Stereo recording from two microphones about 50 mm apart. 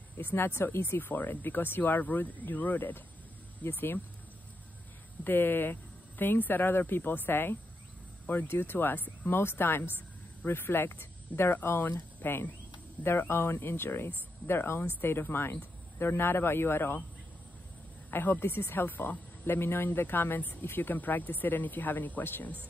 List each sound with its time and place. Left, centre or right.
0.2 s speech: left
3.6 s speech: left
5.2 s speech: left
18.1 s speech: left